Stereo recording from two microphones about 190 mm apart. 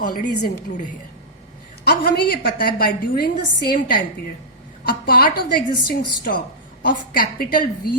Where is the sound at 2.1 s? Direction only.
50° left (ahead or behind).